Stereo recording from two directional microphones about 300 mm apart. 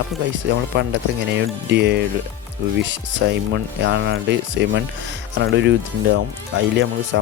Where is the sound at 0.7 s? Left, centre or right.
Right.